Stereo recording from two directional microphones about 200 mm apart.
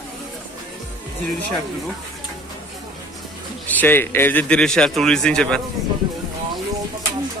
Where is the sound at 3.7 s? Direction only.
10° left (ahead or behind).